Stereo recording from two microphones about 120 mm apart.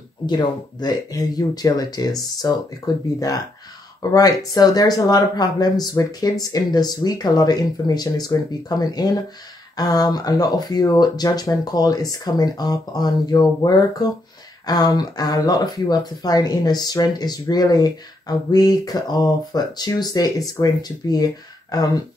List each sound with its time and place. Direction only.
0.3 s speech: 35° left (ahead or behind)